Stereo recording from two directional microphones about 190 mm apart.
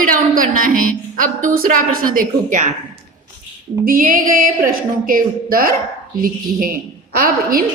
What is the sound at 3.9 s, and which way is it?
A woman's voice, 45° right (ahead or behind).